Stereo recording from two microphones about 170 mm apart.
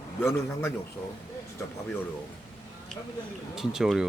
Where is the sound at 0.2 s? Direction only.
15° left (ahead or behind).